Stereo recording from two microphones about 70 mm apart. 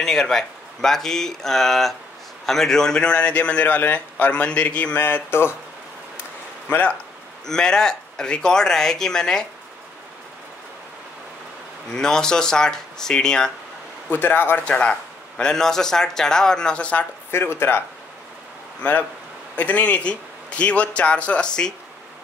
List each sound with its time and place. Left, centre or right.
0.0 s a man's voice: centre; by 5.5 s left
7.4 s a man's voice: centre
11.9 s a man's voice: centre
14.1 s speech: left
14.6 s a man's voice: centre
17.3 s a man's voice: left; by 21.7 s centre